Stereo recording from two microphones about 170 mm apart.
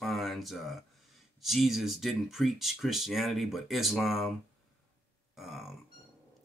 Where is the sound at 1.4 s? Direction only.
Centre (ahead or behind).